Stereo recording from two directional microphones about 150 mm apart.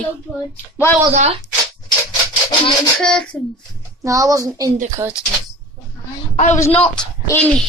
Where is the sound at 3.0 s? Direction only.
5° left (ahead or behind).